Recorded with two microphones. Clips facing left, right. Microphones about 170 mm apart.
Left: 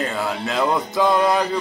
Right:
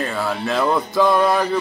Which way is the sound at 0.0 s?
20° left (ahead or behind).